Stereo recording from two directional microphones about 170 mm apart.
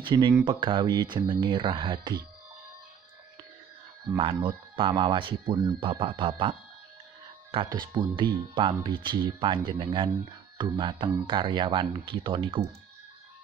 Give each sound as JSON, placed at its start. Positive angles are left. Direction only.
{"t": 0.0, "sound": "speech", "side_deg": -30}
{"t": 4.2, "sound": "speech", "side_deg": -30}
{"t": 7.5, "sound": "speech", "side_deg": -25}